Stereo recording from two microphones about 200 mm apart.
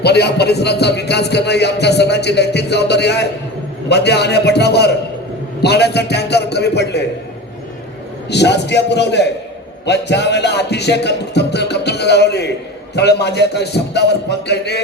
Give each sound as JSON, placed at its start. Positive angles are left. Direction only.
{"t": 0.0, "sound": "speech", "side_deg": 55}
{"t": 8.3, "sound": "speech", "side_deg": 55}